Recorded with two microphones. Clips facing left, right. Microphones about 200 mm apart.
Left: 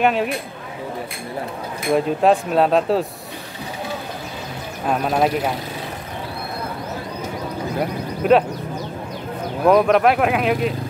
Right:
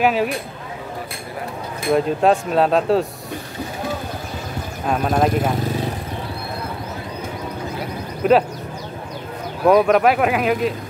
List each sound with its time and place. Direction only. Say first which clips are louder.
0.0 s speech: right 1 dB; centre (ahead or behind)
1.9 s speech: even; centre (ahead or behind)
4.8 s speech: even; centre (ahead or behind)
8.2 s speech: even; centre (ahead or behind)
9.7 s speech: right 1 dB; centre (ahead or behind)